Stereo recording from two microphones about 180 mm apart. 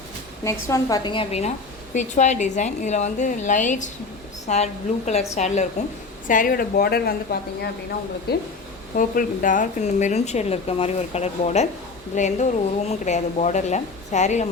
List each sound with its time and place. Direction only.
0.4 s a woman's voice: 20° left (ahead or behind); by 8.4 s 65° left (ahead or behind)
9.0 s a woman's voice: 50° left (ahead or behind)